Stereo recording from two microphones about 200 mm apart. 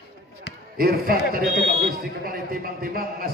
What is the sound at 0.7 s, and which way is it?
A man's voice, 50° right (ahead or behind).